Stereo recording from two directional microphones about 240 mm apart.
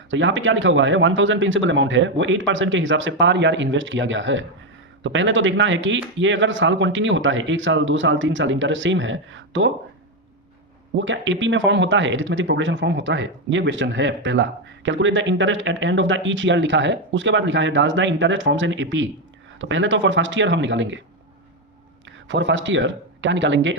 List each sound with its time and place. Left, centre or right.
0.1 s speech: right
10.9 s speech: right
22.3 s speech: right